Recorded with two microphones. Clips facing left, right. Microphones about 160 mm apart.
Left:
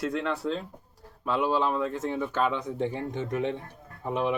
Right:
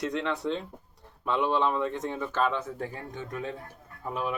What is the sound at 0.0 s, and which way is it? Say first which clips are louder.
A man's voice: left 1 dB; 5° left (ahead or behind).